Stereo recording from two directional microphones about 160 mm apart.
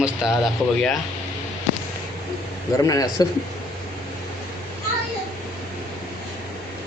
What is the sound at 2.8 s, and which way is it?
Speech, 20° left (ahead or behind).